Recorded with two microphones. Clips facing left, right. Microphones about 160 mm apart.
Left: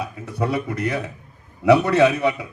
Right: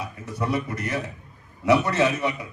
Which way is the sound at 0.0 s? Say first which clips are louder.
Left 4 dB; 60° left (ahead or behind).